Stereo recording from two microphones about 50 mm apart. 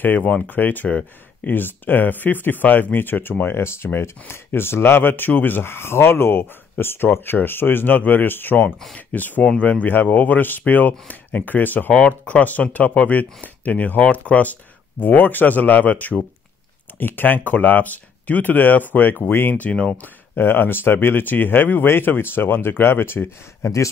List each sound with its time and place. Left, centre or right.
0.0 s speech: left
0.8 s speech: left
1.5 s speech: left
15.0 s speech: left
19.7 s speech: left
20.0 s speech: left